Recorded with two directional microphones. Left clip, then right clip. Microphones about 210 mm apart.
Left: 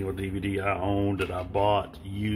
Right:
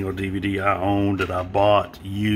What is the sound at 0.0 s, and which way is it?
Speech, 10° right (ahead or behind).